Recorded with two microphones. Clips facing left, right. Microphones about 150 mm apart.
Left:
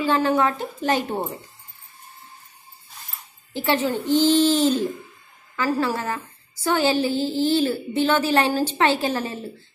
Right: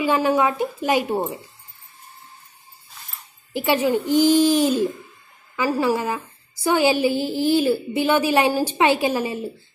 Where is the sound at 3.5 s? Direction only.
10° right (ahead or behind).